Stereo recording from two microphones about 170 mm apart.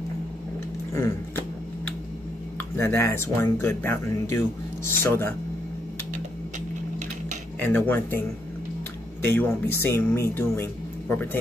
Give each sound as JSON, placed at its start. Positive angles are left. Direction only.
{"t": 0.9, "sound": "speech", "side_deg": 15}
{"t": 2.7, "sound": "speech", "side_deg": 15}
{"t": 7.6, "sound": "speech", "side_deg": 10}
{"t": 9.2, "sound": "speech", "side_deg": 10}